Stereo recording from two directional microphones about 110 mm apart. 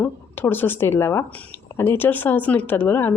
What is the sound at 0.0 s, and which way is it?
Speech, 20° left (ahead or behind).